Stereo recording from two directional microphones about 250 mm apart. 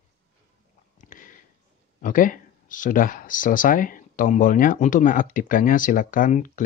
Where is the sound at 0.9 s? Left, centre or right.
Left.